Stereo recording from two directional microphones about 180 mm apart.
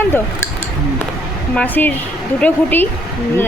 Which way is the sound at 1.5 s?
10° left (ahead or behind).